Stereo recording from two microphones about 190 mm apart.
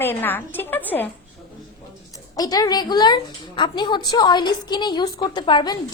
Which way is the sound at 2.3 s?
20° left (ahead or behind).